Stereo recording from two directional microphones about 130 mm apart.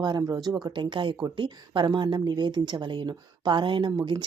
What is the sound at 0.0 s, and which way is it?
Speech, 30° right (ahead or behind).